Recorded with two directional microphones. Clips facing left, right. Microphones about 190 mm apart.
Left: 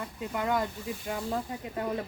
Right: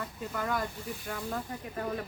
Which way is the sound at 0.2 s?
20° left (ahead or behind).